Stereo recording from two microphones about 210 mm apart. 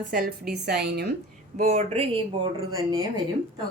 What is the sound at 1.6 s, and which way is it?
Speech, 30° right (ahead or behind).